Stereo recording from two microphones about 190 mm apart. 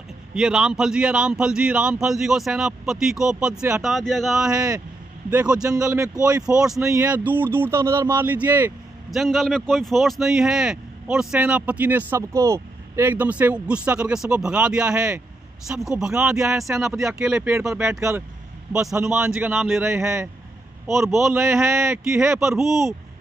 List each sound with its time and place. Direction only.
0.3 s a man's voice: 5° right (ahead or behind)
4.5 s speech: 20° right (ahead or behind)
5.3 s a man's voice: 5° right (ahead or behind)
5.9 s a man's voice: 15° right (ahead or behind)
20.8 s a man's voice: centre (ahead or behind)
21.3 s speech: 15° right (ahead or behind)
22.3 s a man's voice: centre (ahead or behind)